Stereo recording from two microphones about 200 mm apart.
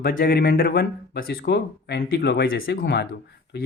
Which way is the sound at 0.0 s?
50° left (ahead or behind).